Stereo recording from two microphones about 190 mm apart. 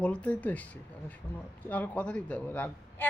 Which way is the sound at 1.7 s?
10° left (ahead or behind).